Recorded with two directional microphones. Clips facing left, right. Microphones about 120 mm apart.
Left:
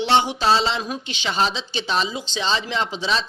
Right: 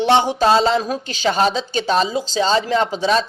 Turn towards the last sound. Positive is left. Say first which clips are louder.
# right 7 dB
turn(degrees=-45)  # may be behind; listen again after turning